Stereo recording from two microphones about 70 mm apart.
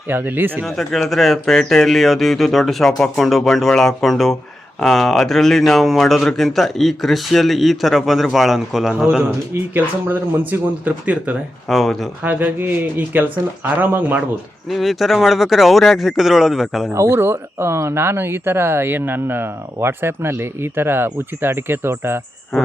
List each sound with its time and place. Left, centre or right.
0.1 s speech: right
0.6 s speech: centre
9.7 s speech: right
11.7 s speech: centre
12.2 s speech: right
14.7 s speech: centre
16.9 s speech: right